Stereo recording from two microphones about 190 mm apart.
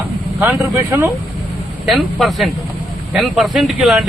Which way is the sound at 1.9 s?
Centre (ahead or behind).